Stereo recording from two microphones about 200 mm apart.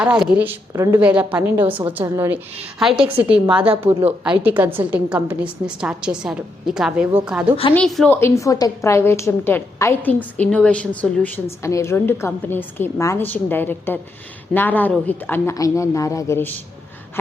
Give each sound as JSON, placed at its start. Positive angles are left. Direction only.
{"t": 0.0, "sound": "a woman's voice", "side_deg": -5}
{"t": 2.9, "sound": "a woman's voice", "side_deg": -25}
{"t": 3.9, "sound": "a woman's voice", "side_deg": -10}